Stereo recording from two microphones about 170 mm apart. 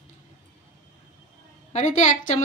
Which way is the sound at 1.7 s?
45° left (ahead or behind).